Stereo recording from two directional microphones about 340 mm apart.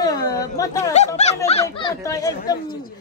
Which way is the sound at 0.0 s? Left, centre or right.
Centre.